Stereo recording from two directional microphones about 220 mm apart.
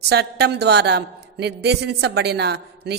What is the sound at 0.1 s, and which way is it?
A woman's voice, 50° right (ahead or behind).